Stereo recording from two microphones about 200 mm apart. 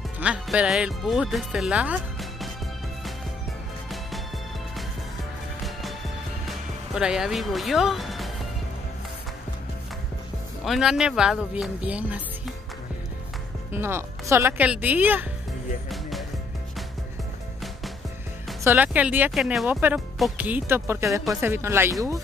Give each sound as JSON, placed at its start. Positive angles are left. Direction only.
{"t": 0.2, "sound": "speech", "side_deg": -5}
{"t": 6.9, "sound": "speech", "side_deg": -5}
{"t": 10.6, "sound": "speech", "side_deg": 0}
{"t": 13.7, "sound": "speech", "side_deg": -10}
{"t": 15.9, "sound": "music", "side_deg": 0}
{"t": 18.6, "sound": "speech", "side_deg": -10}